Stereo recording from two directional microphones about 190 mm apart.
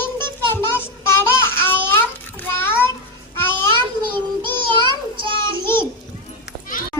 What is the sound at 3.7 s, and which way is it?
Child singing, 25° right (ahead or behind).